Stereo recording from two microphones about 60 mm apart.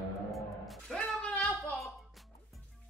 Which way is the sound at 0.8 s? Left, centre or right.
Centre.